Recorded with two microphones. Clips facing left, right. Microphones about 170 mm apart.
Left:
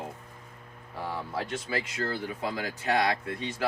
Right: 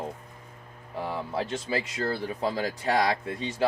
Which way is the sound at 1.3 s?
25° right (ahead or behind).